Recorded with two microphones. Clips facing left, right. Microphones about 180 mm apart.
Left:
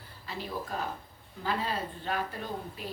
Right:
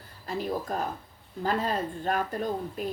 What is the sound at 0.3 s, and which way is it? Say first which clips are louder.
Speech: right 6 dB; 45° right (ahead or behind).